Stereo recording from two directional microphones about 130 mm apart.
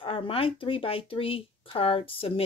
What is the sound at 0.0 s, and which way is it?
Speech, 45° left (ahead or behind).